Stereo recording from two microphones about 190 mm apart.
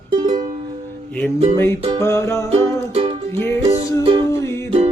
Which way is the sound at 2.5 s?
30° right (ahead or behind).